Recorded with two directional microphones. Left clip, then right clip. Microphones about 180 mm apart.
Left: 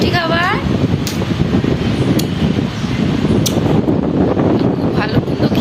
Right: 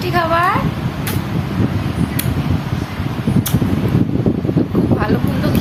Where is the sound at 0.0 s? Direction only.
10° right (ahead or behind).